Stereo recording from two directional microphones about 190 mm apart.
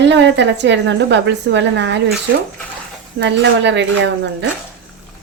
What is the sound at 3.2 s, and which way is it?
A woman's voice, 65° right (ahead or behind).